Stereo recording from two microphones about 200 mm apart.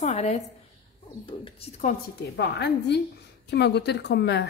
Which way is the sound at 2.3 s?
55° left (ahead or behind).